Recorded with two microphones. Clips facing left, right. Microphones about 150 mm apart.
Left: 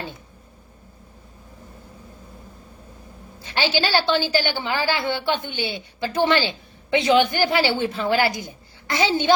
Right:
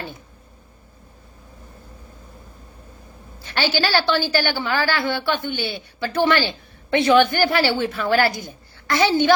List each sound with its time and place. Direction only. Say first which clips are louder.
3.4 s a woman's voice: right 1 dB; 20° left (ahead or behind)